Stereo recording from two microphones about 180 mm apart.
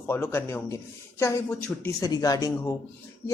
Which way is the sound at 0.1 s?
15° left (ahead or behind).